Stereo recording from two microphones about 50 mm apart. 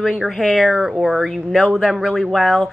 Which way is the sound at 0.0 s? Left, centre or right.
Centre.